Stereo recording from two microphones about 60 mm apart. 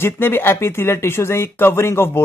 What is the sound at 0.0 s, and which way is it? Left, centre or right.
Speech, left.